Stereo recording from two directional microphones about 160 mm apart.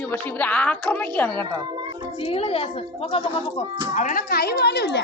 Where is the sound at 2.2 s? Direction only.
35° left (ahead or behind).